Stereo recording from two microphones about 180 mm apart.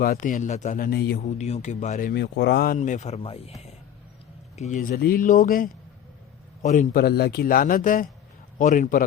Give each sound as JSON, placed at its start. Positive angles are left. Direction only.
{"t": 0.0, "sound": "speech", "side_deg": 50}
{"t": 1.2, "sound": "speech", "side_deg": 40}
{"t": 2.7, "sound": "speech", "side_deg": 45}
{"t": 4.5, "sound": "speech", "side_deg": 40}